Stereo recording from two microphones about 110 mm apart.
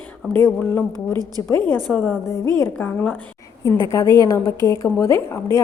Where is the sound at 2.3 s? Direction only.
25° left (ahead or behind).